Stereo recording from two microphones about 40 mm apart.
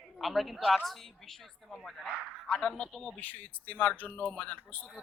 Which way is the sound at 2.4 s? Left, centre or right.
Left.